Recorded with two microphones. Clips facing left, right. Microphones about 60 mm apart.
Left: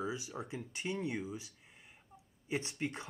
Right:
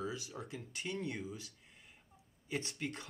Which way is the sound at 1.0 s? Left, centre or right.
Centre.